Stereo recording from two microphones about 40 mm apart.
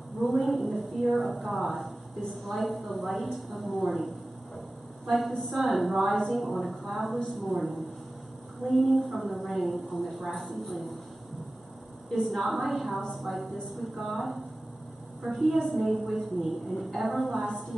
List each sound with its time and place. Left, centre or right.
0.2 s a woman's voice: centre
5.0 s a woman's voice: centre
12.1 s a woman's voice: centre